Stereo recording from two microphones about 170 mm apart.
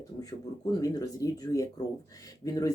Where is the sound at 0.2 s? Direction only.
20° left (ahead or behind).